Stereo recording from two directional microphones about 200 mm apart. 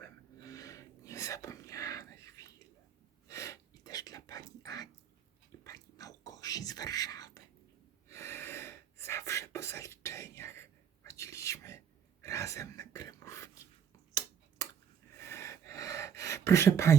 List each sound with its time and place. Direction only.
0.4 s whispering: 15° left (ahead or behind)
3.2 s a sound: 15° left (ahead or behind)
8.1 s gasp: 15° left (ahead or behind)
12.2 s wail: 15° left (ahead or behind)
15.1 s gasp: 15° left (ahead or behind)